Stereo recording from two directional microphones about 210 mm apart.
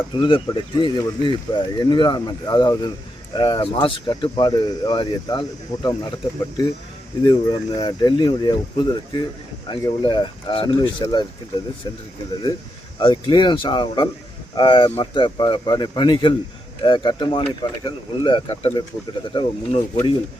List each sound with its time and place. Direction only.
0.2 s speech: 25° left (ahead or behind)
7.3 s speech: 20° left (ahead or behind)
13.0 s speech: 25° left (ahead or behind)